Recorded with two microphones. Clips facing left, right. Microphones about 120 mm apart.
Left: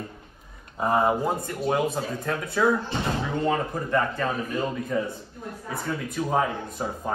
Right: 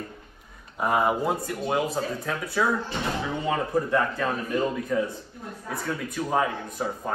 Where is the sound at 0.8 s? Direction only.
25° left (ahead or behind).